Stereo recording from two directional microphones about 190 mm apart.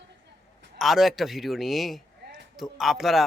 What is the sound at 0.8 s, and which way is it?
Speech, centre (ahead or behind).